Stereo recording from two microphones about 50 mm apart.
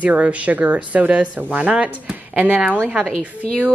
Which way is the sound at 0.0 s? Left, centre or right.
Right.